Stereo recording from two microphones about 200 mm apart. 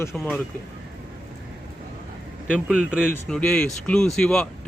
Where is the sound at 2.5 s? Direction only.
5° right (ahead or behind).